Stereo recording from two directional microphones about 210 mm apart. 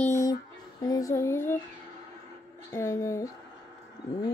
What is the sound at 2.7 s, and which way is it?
Speech, 15° left (ahead or behind).